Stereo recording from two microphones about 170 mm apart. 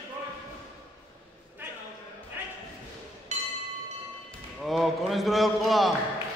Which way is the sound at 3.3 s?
45° right (ahead or behind).